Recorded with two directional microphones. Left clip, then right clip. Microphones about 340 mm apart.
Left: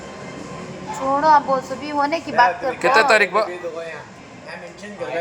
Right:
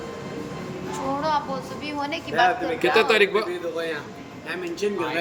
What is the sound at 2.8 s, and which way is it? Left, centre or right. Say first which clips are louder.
Speech: left 5 dB; centre.